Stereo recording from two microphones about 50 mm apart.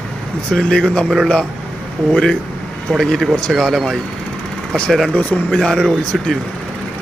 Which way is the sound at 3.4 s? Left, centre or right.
Centre.